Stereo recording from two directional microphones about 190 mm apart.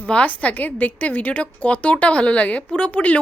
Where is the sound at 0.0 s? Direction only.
5° left (ahead or behind).